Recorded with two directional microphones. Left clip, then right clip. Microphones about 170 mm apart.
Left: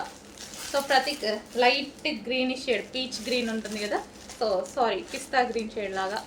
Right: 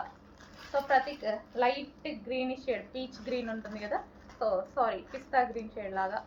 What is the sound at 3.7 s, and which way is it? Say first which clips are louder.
A woman's voice: left 5 dB; 60° left (ahead or behind).